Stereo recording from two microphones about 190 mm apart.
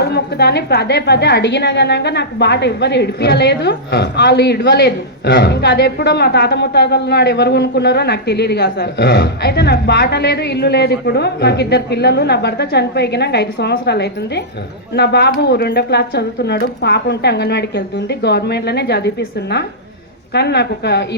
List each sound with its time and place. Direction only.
0.0 s a woman's voice: 60° left (ahead or behind)